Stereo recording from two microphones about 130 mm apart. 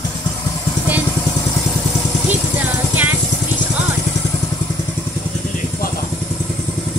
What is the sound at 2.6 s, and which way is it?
Vehicle, 15° right (ahead or behind).